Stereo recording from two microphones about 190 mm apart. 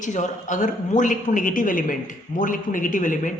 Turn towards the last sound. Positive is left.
turn(degrees=45)  # may be behind; listen again after turning